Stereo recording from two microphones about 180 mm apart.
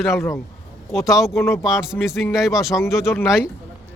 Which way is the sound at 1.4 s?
15° left (ahead or behind).